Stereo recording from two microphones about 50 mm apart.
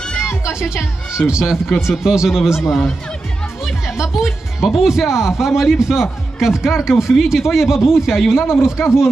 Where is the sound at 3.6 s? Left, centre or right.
Centre.